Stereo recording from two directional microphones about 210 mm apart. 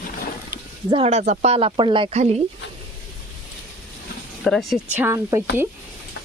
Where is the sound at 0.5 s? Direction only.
50° left (ahead or behind).